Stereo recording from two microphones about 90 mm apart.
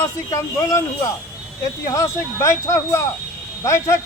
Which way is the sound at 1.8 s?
40° left (ahead or behind).